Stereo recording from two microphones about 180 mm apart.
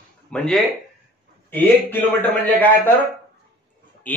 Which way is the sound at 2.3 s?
10° left (ahead or behind).